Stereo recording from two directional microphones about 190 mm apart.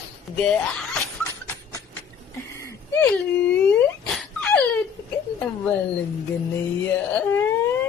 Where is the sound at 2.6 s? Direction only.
15° left (ahead or behind).